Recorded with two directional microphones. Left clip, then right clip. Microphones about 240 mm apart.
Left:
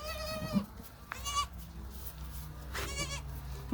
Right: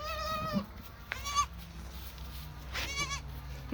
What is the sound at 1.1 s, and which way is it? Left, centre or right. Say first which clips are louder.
Goat: right 3 dB; centre.